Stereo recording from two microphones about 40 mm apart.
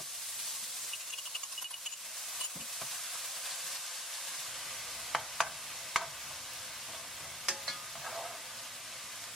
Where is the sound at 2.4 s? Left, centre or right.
Centre.